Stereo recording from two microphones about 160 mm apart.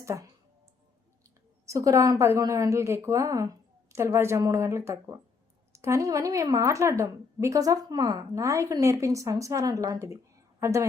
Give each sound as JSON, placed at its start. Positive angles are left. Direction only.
{"t": 0.0, "sound": "speech", "side_deg": -20}
{"t": 1.6, "sound": "a woman's voice", "side_deg": -20}